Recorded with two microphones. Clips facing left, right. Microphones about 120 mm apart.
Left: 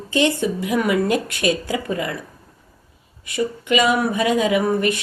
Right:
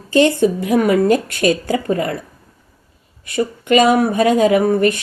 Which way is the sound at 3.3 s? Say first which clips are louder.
Right 5 dB; 45° right (ahead or behind).